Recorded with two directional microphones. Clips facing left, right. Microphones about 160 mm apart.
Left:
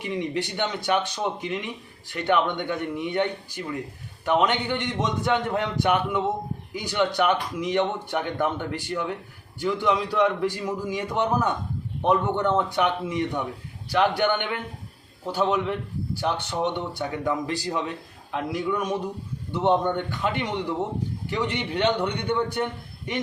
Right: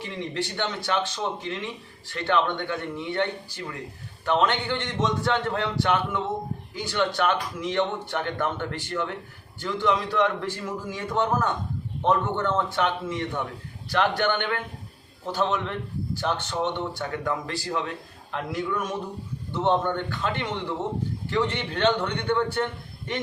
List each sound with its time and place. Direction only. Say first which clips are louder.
0.0 s speech: left 3 dB; 15° left (ahead or behind)